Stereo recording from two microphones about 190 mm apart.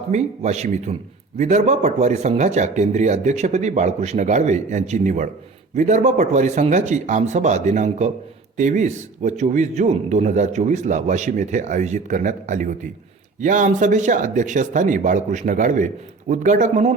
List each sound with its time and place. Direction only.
0.1 s speech: 35° right (ahead or behind)